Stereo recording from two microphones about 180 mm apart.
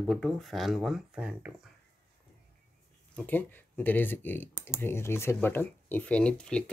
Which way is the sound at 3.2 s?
10° left (ahead or behind).